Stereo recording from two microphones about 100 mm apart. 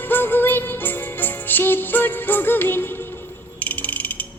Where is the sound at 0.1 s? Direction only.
20° left (ahead or behind).